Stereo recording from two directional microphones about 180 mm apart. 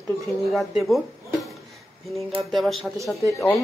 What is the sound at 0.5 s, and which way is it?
Speech, centre (ahead or behind).